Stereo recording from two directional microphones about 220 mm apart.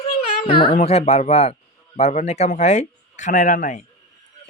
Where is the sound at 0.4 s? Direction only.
25° left (ahead or behind).